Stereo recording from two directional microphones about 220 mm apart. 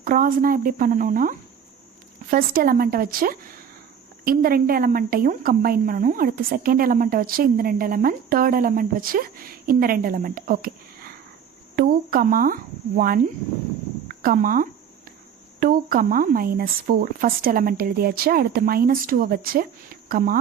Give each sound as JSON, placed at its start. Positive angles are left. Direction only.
{"t": 0.0, "sound": "a woman's voice", "side_deg": -40}
{"t": 11.8, "sound": "a sound", "side_deg": -40}
{"t": 14.1, "sound": "a woman's voice", "side_deg": -40}